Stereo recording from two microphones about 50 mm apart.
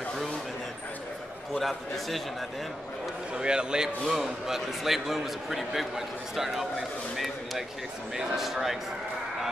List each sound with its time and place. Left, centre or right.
1.5 s a man's voice: centre
3.3 s a man's voice: centre
8.2 s a man's voice: centre